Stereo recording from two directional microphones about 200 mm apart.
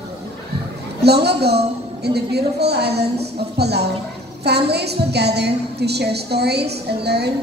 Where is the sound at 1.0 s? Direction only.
55° right (ahead or behind).